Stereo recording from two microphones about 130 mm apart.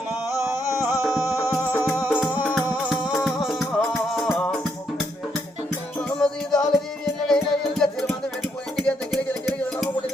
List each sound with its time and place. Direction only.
0.8 s music: 15° right (ahead or behind)
1.0 s music: 5° right (ahead or behind)
6.1 s music: 5° left (ahead or behind)